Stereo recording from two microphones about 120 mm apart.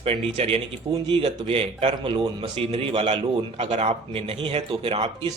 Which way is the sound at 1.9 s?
40° right (ahead or behind).